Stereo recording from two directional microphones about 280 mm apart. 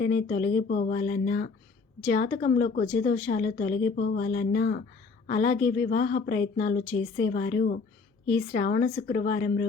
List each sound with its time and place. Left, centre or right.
0.0 s a woman's voice: left